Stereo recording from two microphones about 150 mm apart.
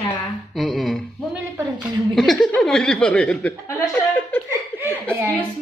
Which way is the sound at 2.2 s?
Centre (ahead or behind).